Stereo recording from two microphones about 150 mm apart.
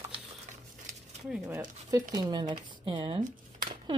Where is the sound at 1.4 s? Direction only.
20° right (ahead or behind).